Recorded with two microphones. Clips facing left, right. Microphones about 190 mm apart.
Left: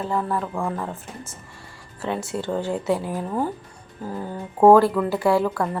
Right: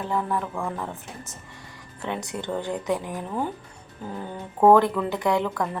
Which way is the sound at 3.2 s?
10° left (ahead or behind).